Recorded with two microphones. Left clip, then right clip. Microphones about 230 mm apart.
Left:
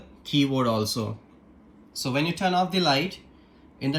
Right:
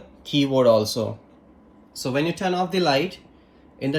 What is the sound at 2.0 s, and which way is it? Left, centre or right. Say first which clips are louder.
Speech: right 3 dB; left.